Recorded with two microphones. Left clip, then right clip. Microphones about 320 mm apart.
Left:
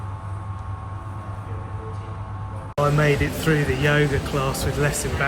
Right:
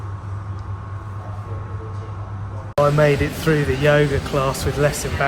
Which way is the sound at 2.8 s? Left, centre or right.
Centre.